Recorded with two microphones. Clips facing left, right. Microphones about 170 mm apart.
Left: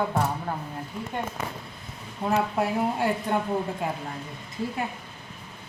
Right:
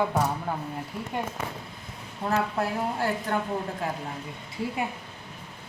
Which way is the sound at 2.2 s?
10° left (ahead or behind).